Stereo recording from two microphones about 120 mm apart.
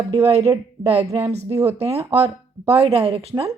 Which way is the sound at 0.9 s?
50° right (ahead or behind).